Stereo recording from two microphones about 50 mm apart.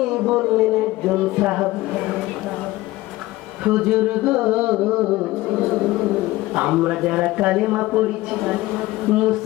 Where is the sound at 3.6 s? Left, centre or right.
Centre.